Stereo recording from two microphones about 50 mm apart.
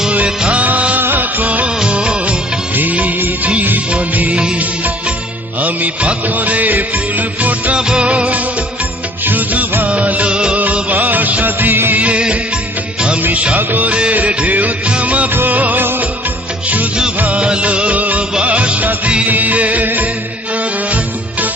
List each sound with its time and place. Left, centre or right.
0.5 s music of bollywood: right
0.9 s music of bollywood: right
1.8 s music of bollywood: centre
2.7 s music: right
7.8 s music: centre
10.8 s music: right
11.9 s music: right
13.3 s music: right
13.6 s music: right
15.3 s music: right
17.2 s music of bollywood: right
18.4 s music: right